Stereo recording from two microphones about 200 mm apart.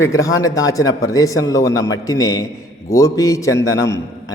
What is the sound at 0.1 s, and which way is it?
A man's voice, 15° left (ahead or behind).